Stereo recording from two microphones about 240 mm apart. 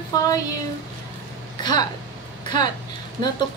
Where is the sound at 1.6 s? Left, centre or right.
Centre.